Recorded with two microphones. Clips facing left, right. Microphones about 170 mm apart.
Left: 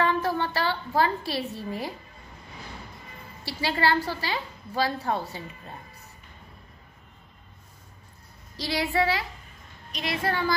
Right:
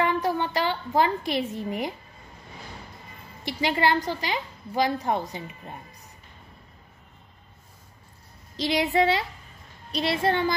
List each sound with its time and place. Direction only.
0.0 s a woman's voice: 15° right (ahead or behind)
3.4 s a woman's voice: 20° right (ahead or behind)
8.5 s a woman's voice: 20° right (ahead or behind)